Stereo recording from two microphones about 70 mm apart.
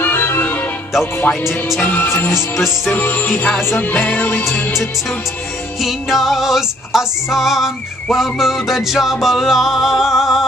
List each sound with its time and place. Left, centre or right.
0.0 s music: left
1.8 s music: left
2.0 s music: left
2.9 s music: left
3.9 s music: left
5.8 s music: centre